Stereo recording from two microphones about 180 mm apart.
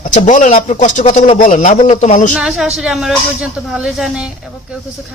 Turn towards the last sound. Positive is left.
turn(degrees=-5)  # may be behind; listen again after turning